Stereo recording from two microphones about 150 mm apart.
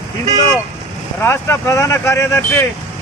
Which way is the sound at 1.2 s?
15° left (ahead or behind).